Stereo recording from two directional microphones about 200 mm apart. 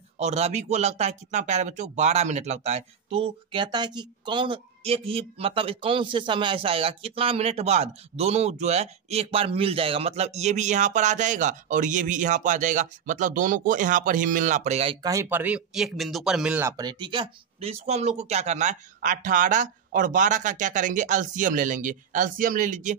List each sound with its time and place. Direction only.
0.2 s speech: 35° right (ahead or behind)